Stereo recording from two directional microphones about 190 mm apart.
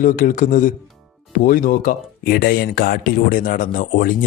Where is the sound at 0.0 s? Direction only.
45° left (ahead or behind).